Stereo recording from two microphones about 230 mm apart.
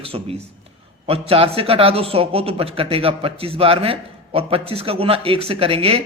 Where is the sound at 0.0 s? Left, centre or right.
Right.